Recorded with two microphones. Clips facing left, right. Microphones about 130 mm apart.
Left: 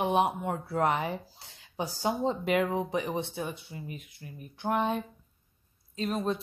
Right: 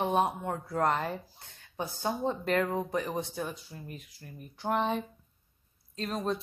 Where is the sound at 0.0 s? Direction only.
10° left (ahead or behind).